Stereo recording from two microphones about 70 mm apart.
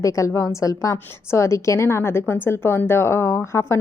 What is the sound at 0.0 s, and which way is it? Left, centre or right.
A woman's voice, left.